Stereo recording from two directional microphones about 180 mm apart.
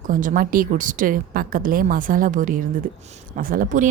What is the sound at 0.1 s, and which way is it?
Speech, 45° right (ahead or behind).